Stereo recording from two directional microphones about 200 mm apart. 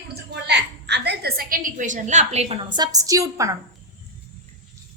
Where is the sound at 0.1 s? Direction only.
55° right (ahead or behind); by 3.5 s 15° right (ahead or behind).